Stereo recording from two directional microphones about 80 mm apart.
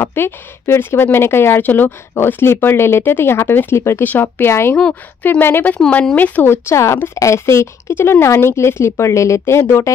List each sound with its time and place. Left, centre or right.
0.0 s speech: left